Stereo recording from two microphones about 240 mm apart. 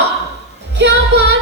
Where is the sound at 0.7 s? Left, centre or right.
Right.